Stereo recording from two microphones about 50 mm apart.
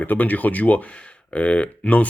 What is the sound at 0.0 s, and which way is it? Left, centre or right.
Speech, left.